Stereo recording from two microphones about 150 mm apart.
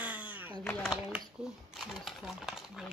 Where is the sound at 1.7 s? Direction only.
Centre (ahead or behind).